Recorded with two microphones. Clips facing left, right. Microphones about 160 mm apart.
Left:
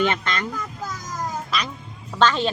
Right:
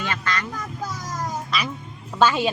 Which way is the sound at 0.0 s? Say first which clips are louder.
Left 5 dB; 25° left (ahead or behind).